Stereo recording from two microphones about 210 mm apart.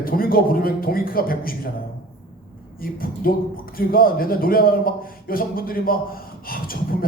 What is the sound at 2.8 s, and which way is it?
A man's voice, 45° left (ahead or behind).